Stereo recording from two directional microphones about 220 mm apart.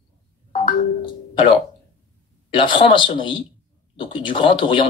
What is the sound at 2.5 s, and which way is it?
Speech, 25° left (ahead or behind).